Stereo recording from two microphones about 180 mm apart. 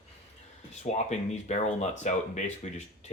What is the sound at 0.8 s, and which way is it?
Speech, 40° left (ahead or behind).